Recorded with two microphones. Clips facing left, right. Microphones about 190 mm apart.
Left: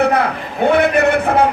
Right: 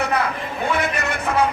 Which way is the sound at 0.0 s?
60° left (ahead or behind).